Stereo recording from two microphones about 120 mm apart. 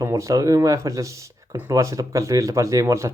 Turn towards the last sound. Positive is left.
turn(degrees=-25)  # may be behind; listen again after turning